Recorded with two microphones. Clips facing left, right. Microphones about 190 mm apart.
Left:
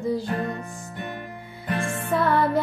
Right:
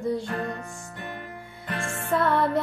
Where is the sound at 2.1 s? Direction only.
Centre (ahead or behind).